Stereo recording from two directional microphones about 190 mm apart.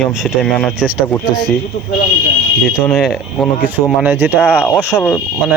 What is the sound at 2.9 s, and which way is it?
Speech, centre (ahead or behind).